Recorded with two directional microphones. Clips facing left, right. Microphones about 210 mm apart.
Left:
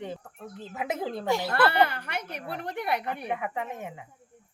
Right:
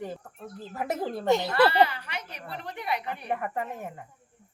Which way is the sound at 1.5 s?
55° left (ahead or behind).